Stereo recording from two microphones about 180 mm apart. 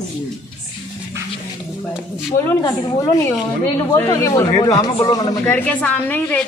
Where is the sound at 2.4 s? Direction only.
20° left (ahead or behind).